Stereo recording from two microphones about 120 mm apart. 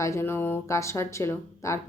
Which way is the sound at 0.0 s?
20° left (ahead or behind).